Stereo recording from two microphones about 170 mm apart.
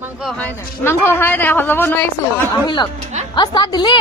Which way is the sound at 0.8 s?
15° left (ahead or behind).